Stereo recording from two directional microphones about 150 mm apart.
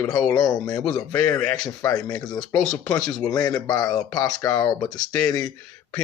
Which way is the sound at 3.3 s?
25° left (ahead or behind).